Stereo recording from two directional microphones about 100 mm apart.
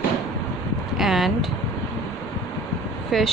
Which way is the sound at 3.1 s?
5° left (ahead or behind).